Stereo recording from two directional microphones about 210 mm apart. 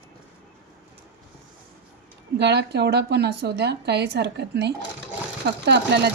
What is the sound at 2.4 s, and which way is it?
A woman's voice, 55° right (ahead or behind).